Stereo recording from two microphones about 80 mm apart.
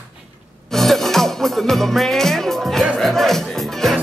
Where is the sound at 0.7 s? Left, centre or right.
Centre.